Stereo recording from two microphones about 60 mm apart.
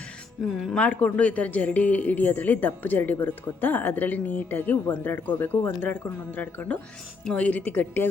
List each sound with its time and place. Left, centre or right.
0.5 s speech: centre
0.8 s speech: centre